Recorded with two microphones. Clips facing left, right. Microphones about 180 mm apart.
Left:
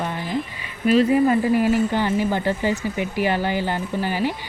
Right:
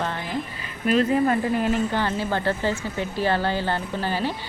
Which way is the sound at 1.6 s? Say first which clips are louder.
Left 4 dB; 10° left (ahead or behind).